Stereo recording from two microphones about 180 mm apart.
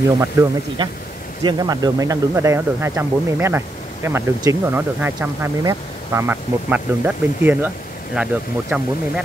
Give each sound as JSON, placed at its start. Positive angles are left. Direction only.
{"t": 0.2, "sound": "speech", "side_deg": -15}